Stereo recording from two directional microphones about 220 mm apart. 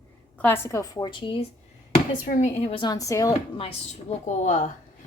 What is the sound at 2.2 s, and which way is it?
A woman's voice, 30° left (ahead or behind).